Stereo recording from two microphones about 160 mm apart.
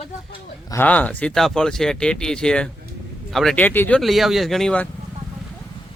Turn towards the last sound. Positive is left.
turn(degrees=5)  # may be behind; listen again after turning